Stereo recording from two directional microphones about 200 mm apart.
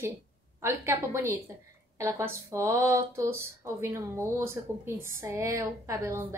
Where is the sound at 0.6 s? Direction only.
15° right (ahead or behind).